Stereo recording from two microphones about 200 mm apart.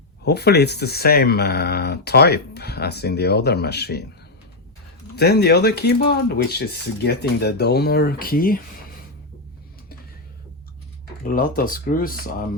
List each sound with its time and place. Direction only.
0.3 s speech: 55° left (ahead or behind)
5.1 s speech: 55° left (ahead or behind)
11.2 s speech: 45° left (ahead or behind)